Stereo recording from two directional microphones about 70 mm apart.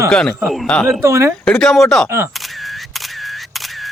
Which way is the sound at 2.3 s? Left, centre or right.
Centre.